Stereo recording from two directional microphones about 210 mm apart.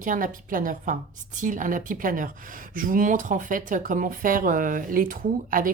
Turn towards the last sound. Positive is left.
turn(degrees=-40)  # may be behind; listen again after turning